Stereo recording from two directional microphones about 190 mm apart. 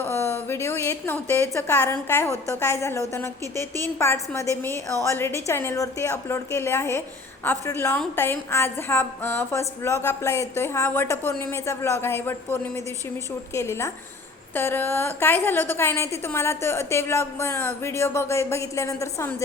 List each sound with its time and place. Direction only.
0.0 s a woman's voice: 10° left (ahead or behind)